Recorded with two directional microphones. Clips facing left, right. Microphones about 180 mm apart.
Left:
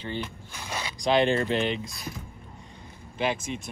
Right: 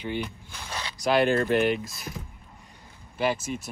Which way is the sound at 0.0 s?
15° right (ahead or behind).